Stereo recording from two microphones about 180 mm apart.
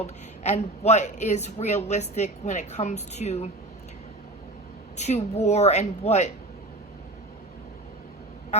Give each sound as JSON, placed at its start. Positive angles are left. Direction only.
{"t": 0.4, "sound": "a woman's voice", "side_deg": 40}
{"t": 4.9, "sound": "a woman's voice", "side_deg": 40}